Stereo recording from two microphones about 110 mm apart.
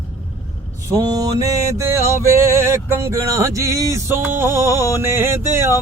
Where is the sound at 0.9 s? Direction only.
35° right (ahead or behind).